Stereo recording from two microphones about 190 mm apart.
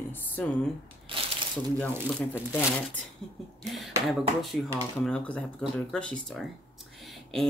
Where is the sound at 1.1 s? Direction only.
25° right (ahead or behind).